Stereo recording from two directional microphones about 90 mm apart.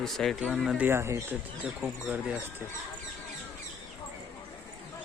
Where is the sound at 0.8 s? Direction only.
25° right (ahead or behind).